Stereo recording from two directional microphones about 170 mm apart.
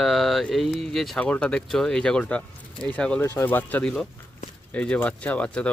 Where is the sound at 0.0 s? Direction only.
Centre (ahead or behind).